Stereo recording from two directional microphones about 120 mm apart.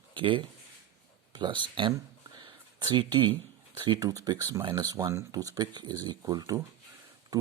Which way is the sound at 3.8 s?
35° right (ahead or behind).